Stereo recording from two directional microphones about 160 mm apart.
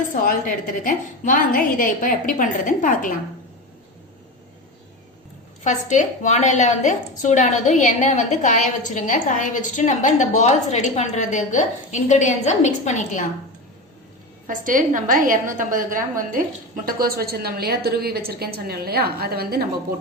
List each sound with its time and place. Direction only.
0.3 s a woman's voice: 60° left (ahead or behind)
5.6 s a woman's voice: 50° left (ahead or behind)
14.4 s a woman's voice: 55° right (ahead or behind); by 19.6 s 75° right (ahead or behind)